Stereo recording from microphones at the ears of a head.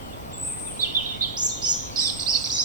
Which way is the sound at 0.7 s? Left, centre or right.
Right.